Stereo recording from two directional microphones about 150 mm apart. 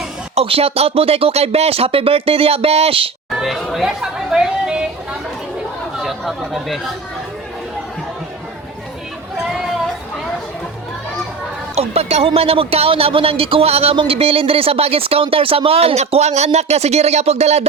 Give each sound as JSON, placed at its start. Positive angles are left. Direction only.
{"t": 0.3, "sound": "speech", "side_deg": -40}
{"t": 3.2, "sound": "speech", "side_deg": 0}
{"t": 6.0, "sound": "chatter", "side_deg": 0}
{"t": 11.7, "sound": "speech", "side_deg": -45}